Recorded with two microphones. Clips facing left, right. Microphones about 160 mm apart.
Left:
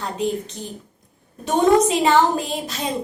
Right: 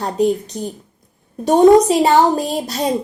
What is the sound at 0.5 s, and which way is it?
A woman's voice, 45° right (ahead or behind).